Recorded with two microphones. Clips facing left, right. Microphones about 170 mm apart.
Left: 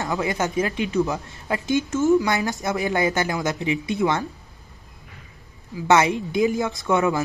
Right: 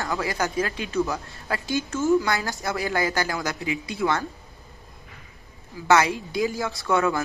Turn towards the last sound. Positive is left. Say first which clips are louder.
# left 2 dB
turn(degrees=20)  # may be behind; listen again after turning